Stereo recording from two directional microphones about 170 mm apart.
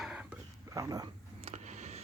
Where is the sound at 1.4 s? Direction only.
40° right (ahead or behind).